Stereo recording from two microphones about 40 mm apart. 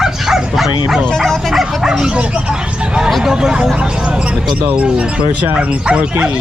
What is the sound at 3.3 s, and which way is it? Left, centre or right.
Speech, centre.